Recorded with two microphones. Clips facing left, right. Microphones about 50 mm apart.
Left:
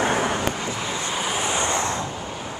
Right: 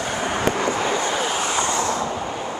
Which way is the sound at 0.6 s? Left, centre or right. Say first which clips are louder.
Right 7 dB; right.